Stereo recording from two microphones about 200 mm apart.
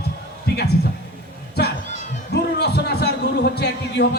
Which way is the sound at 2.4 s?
55° left (ahead or behind).